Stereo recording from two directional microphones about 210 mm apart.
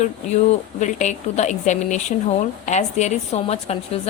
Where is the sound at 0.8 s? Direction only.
35° left (ahead or behind).